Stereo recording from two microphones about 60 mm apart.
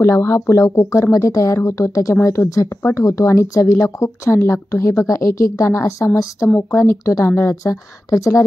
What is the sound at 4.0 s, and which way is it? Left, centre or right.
A woman's voice, left.